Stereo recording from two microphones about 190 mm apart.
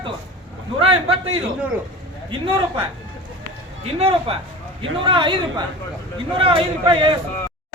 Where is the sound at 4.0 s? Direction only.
30° right (ahead or behind).